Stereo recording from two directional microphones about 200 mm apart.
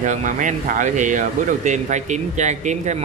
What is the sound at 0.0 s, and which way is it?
Speech, 40° right (ahead or behind).